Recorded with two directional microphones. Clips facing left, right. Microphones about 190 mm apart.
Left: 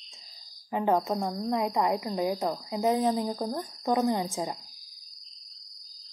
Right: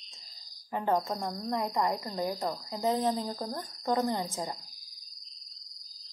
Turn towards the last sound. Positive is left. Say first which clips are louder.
# left 4 dB
turn(degrees=15)  # may be behind; listen again after turning